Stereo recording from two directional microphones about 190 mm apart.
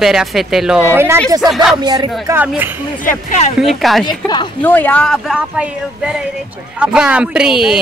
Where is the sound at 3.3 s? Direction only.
40° left (ahead or behind).